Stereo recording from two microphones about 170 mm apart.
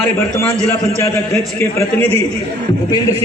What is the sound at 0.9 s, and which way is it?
A man's voice, 15° left (ahead or behind).